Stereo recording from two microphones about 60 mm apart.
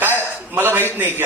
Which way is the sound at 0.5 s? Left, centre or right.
Right.